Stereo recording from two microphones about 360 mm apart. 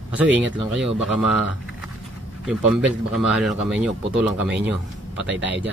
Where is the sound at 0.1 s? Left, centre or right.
Centre.